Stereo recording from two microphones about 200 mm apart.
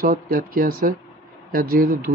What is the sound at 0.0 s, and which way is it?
Speech, 45° right (ahead or behind).